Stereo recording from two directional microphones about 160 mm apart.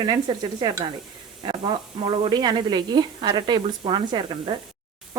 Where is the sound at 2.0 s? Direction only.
25° right (ahead or behind).